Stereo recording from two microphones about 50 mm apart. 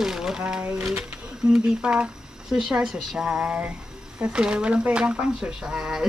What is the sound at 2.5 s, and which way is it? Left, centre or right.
Speech, centre.